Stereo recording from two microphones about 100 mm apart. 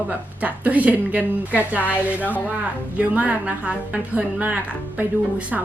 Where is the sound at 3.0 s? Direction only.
15° right (ahead or behind).